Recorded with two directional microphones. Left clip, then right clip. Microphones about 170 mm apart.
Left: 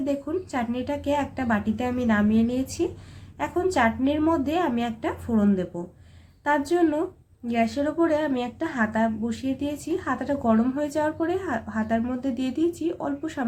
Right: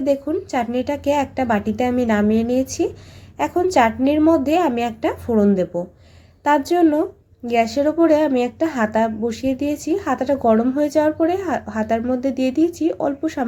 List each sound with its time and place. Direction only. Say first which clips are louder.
0.0 s a woman's voice: right 8 dB; 30° right (ahead or behind)